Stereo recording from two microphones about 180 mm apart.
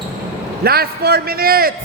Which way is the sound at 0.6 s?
60° right (ahead or behind).